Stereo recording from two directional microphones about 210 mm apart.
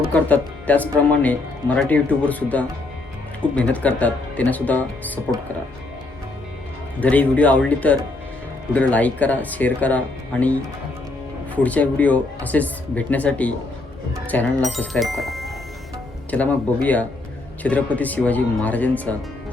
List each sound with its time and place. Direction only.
0.1 s speech: 5° left (ahead or behind)
7.0 s speech: 5° left (ahead or behind)